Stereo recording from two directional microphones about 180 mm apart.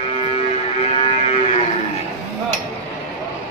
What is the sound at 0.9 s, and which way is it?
Cattle, 30° left (ahead or behind).